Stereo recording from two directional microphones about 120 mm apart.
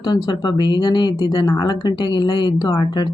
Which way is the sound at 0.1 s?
35° left (ahead or behind).